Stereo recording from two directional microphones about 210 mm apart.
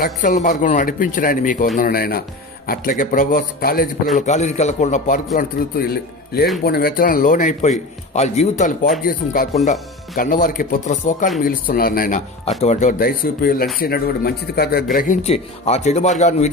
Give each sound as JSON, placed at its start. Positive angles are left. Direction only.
{"t": 0.0, "sound": "a man's voice", "side_deg": 40}
{"t": 4.3, "sound": "a man's voice", "side_deg": 35}